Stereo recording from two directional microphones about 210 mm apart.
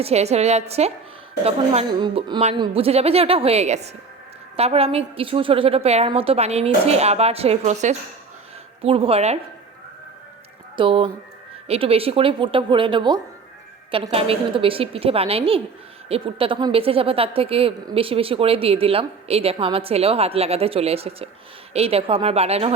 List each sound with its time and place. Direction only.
0.0 s a woman's voice: 30° right (ahead or behind)
10.8 s a woman's voice: 25° right (ahead or behind)